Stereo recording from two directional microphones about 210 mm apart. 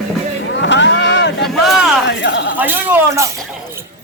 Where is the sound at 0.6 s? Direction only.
60° left (ahead or behind).